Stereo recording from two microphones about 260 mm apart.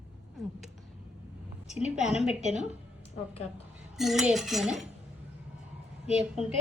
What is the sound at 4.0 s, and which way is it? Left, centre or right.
Speech, centre.